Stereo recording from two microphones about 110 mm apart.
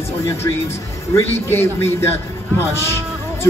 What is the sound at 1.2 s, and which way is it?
Speech, 20° left (ahead or behind).